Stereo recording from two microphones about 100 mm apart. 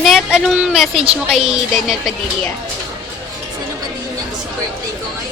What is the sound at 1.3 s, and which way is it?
Music, centre (ahead or behind).